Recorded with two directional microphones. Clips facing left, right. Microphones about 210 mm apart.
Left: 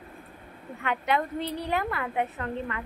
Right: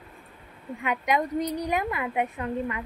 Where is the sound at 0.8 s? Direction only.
15° right (ahead or behind).